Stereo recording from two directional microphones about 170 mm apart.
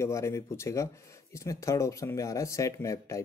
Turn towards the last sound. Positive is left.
turn(degrees=20)  # may be behind; listen again after turning